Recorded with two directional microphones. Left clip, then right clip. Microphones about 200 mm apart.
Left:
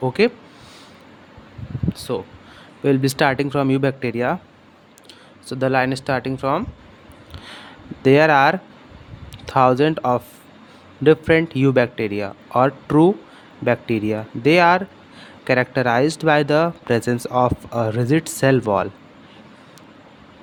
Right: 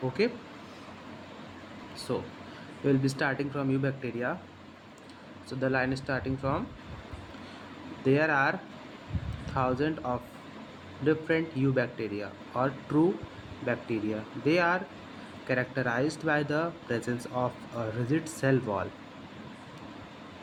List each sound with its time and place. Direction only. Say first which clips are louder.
0.2 s speech: left 11 dB; 60° left (ahead or behind)
2.1 s speech: left 6 dB; 55° left (ahead or behind)
5.5 s speech: left 10 dB; 60° left (ahead or behind)
8.0 s speech: left 12 dB; 60° left (ahead or behind)